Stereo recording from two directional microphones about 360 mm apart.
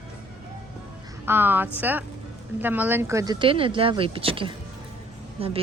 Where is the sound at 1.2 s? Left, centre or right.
Centre.